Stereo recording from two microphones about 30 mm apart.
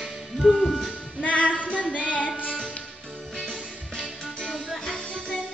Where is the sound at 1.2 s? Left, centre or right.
Left.